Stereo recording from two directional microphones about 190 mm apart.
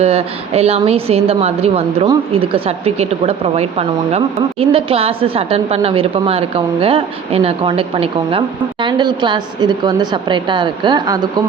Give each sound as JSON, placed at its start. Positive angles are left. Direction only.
{"t": 0.0, "sound": "a woman's voice", "side_deg": -35}